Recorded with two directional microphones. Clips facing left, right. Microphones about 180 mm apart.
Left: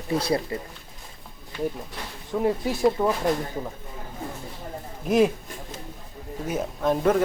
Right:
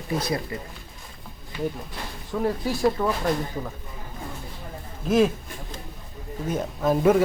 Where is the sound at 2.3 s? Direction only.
20° left (ahead or behind).